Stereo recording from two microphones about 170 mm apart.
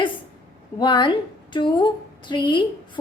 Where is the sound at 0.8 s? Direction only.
25° left (ahead or behind).